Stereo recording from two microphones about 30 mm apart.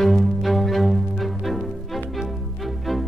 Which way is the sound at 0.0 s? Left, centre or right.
Centre.